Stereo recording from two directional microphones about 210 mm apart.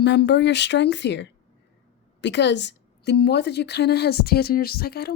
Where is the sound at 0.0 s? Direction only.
55° left (ahead or behind).